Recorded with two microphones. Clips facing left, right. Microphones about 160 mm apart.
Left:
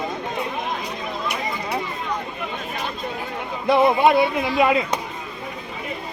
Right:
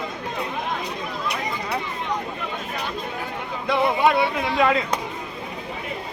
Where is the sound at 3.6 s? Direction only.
20° left (ahead or behind).